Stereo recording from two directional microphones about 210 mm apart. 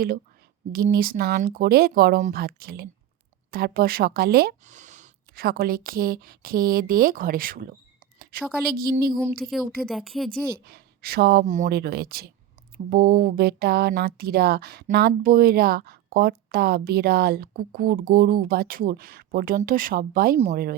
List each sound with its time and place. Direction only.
0.7 s speech: 45° right (ahead or behind)
8.7 s speech: 45° right (ahead or behind)
9.4 s a woman's voice: centre (ahead or behind)
10.7 s speech: 50° right (ahead or behind)